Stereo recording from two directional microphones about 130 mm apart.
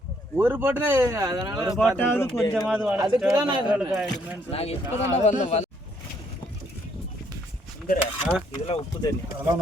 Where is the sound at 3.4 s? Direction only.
35° right (ahead or behind).